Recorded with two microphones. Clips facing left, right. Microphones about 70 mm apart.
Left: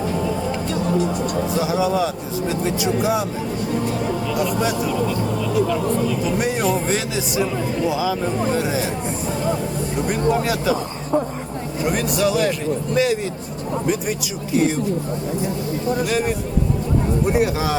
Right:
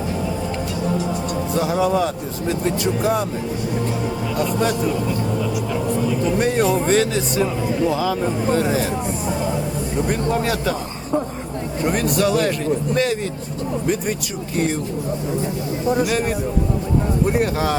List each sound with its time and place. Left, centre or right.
1.5 s speech: centre
4.4 s speech: centre
6.2 s speech: centre
10.3 s a man's voice: centre
15.9 s speech: centre
17.2 s speech: centre